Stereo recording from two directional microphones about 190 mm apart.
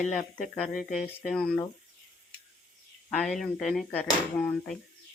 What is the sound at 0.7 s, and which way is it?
Speech, 45° left (ahead or behind).